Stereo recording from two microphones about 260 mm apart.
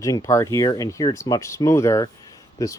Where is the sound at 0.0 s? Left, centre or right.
Centre.